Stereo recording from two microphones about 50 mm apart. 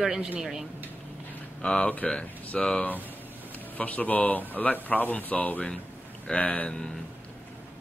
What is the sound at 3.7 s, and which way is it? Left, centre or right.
Speech, left.